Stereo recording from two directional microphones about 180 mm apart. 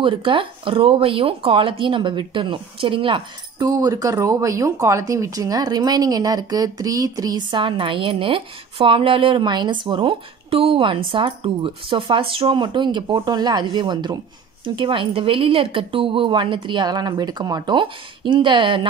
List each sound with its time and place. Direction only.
0.0 s speech: 30° right (ahead or behind)